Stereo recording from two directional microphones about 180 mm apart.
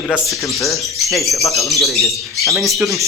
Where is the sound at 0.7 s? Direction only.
15° left (ahead or behind).